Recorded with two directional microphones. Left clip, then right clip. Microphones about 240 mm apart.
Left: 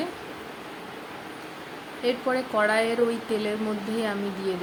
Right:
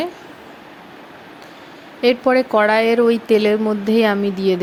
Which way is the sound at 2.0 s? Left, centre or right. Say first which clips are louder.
Right 11 dB; right.